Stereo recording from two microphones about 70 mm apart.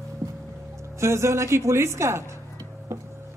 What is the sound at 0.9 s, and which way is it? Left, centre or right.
A woman's voice, right.